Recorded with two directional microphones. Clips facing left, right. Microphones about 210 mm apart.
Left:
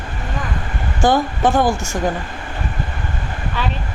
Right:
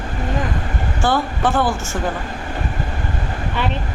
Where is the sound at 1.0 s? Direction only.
15° left (ahead or behind).